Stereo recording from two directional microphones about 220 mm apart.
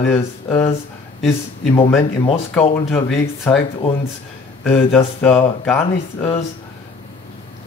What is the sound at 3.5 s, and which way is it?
Speech, 5° left (ahead or behind).